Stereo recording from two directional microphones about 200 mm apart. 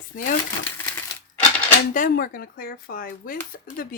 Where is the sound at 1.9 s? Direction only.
45° left (ahead or behind).